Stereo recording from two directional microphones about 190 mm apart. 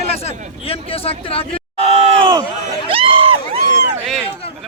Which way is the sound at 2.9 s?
30° right (ahead or behind).